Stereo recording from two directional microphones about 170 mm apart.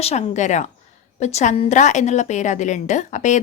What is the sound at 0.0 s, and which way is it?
A woman's voice, 40° left (ahead or behind).